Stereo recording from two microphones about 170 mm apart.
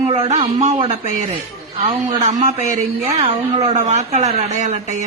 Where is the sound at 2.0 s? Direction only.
45° right (ahead or behind).